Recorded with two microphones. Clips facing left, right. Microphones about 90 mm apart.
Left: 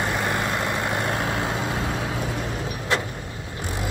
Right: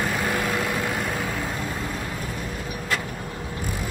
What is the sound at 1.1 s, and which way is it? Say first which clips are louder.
Vehicle: left 3 dB; 70° left (ahead or behind).